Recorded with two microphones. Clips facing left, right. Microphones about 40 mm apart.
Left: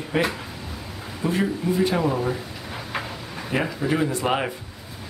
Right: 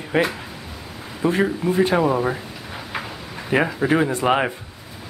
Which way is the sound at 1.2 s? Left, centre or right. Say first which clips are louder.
Right 4 dB; right.